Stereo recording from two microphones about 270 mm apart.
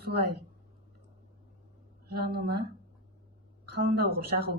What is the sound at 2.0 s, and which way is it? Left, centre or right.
Speech, right.